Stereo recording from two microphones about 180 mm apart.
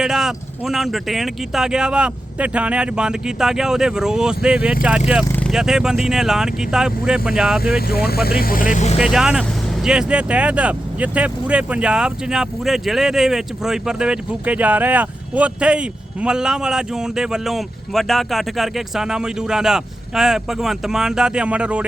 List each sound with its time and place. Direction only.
0.0 s speech: centre (ahead or behind)
5.2 s a sound: 10° left (ahead or behind)
5.5 s speech: 5° right (ahead or behind)
7.8 s speech: 60° left (ahead or behind); by 9.0 s 40° left (ahead or behind)
9.0 s speech: 5° right (ahead or behind)